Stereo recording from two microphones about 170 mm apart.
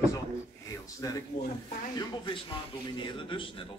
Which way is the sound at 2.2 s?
30° left (ahead or behind).